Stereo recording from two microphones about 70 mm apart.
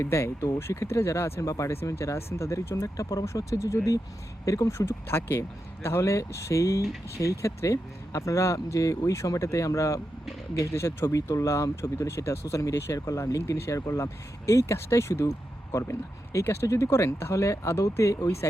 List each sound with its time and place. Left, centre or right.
0.0 s speech: left
5.0 s speech: left
18.2 s speech: left